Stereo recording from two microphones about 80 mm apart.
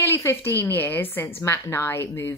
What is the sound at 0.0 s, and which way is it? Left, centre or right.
Speech, left.